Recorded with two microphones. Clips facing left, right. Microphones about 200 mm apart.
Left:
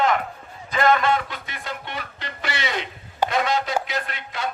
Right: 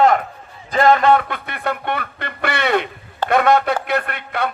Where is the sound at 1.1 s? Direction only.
60° right (ahead or behind).